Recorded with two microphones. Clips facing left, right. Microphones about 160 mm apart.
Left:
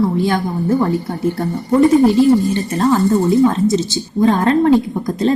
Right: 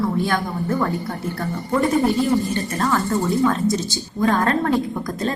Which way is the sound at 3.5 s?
25° left (ahead or behind).